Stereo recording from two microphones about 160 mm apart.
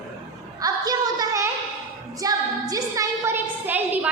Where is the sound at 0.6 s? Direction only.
25° right (ahead or behind).